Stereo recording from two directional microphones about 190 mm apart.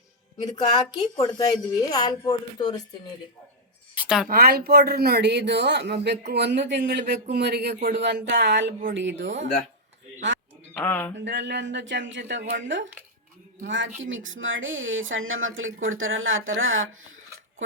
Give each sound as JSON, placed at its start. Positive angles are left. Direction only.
{"t": 0.3, "sound": "a woman's voice", "side_deg": 20}
{"t": 3.9, "sound": "a sound", "side_deg": -5}
{"t": 4.3, "sound": "speech", "side_deg": -55}
{"t": 10.8, "sound": "speech", "side_deg": 10}
{"t": 11.2, "sound": "speech", "side_deg": -65}